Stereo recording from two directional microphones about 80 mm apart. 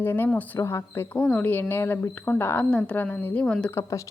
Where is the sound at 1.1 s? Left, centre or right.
Centre.